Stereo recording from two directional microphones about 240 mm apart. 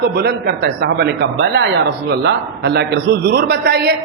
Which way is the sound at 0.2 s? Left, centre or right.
Right.